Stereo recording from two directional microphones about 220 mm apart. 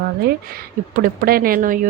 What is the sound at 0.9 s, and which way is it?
Speech, 40° right (ahead or behind).